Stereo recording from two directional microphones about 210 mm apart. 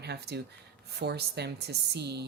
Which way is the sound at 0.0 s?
50° right (ahead or behind).